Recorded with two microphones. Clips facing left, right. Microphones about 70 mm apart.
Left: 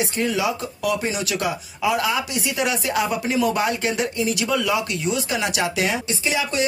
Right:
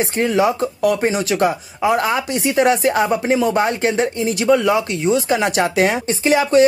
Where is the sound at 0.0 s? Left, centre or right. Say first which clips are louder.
Right 6 dB; right.